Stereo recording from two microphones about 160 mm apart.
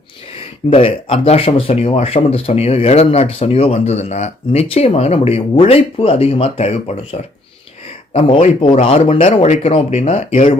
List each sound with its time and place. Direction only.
0.3 s speech: 35° left (ahead or behind)